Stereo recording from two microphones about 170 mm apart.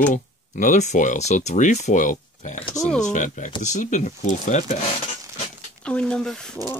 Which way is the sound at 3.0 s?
45° left (ahead or behind).